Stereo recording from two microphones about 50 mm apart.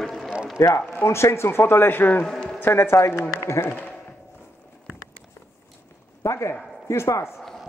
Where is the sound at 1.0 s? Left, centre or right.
Left.